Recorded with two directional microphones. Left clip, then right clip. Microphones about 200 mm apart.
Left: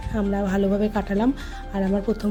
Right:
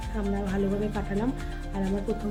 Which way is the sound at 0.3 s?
50° left (ahead or behind).